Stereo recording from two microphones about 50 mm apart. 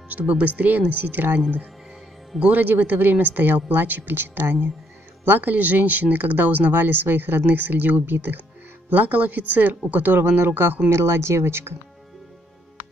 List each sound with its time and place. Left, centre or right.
0.1 s speech: right
2.5 s speech: right
10.9 s speech: right